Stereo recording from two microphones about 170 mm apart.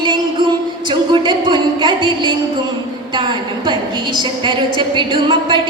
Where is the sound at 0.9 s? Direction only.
25° right (ahead or behind).